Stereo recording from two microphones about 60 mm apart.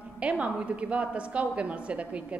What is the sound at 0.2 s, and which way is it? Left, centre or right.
A woman's voice, right.